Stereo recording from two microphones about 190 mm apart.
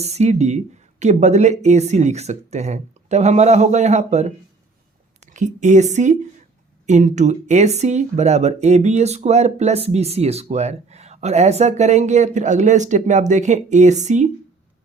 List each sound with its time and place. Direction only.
0.0 s a woman's voice: 35° right (ahead or behind)